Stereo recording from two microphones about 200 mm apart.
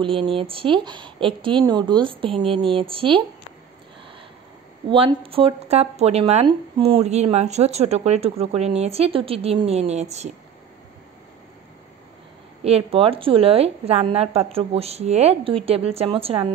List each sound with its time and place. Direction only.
0.0 s a woman's voice: 25° right (ahead or behind)
4.8 s speech: 25° right (ahead or behind)
12.6 s a woman's voice: 30° right (ahead or behind)